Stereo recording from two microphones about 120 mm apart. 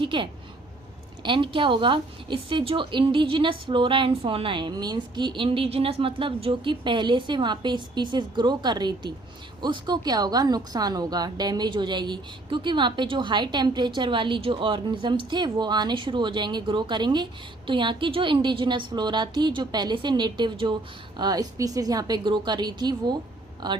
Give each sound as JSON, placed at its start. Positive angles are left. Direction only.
{"t": 0.0, "sound": "a woman's voice", "side_deg": -45}